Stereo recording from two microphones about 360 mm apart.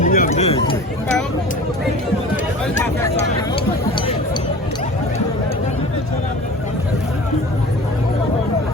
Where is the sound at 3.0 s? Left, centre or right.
Centre.